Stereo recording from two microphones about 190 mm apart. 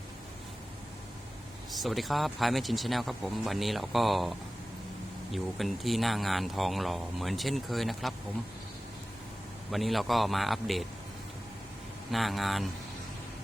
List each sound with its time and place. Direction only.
1.7 s speech: centre (ahead or behind)
9.7 s speech: centre (ahead or behind)
12.1 s speech: centre (ahead or behind)